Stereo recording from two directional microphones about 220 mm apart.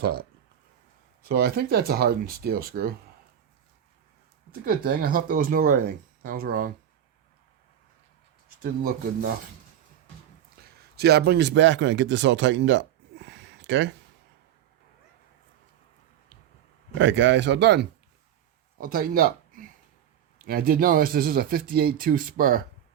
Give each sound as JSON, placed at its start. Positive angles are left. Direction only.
{"t": 0.0, "sound": "speech", "side_deg": -45}
{"t": 4.6, "sound": "speech", "side_deg": -45}
{"t": 10.9, "sound": "speech", "side_deg": -45}
{"t": 17.0, "sound": "speech", "side_deg": -55}
{"t": 18.8, "sound": "speech", "side_deg": -40}